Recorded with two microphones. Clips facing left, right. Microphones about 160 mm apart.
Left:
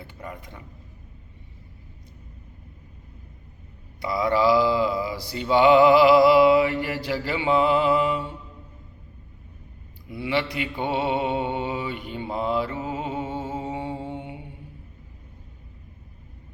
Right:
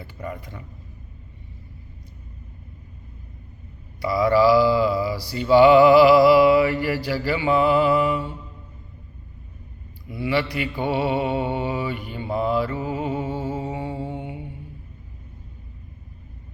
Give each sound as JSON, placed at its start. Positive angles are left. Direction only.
{"t": 4.0, "sound": "mantra", "side_deg": 20}
{"t": 10.2, "sound": "mantra", "side_deg": 20}